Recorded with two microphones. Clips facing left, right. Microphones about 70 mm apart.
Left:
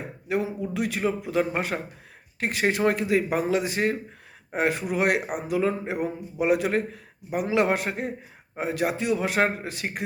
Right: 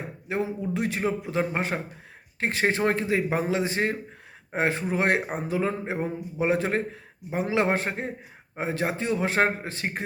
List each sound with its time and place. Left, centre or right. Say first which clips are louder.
0.3 s a man's voice: left 1 dB; right